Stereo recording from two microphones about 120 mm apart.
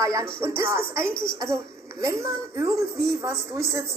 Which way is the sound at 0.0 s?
25° right (ahead or behind).